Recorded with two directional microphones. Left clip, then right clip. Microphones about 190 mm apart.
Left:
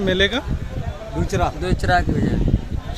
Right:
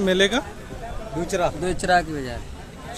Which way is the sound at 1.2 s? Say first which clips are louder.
Left 1 dB; 55° left (ahead or behind).